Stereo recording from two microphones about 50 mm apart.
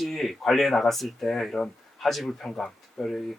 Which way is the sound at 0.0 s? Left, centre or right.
Centre.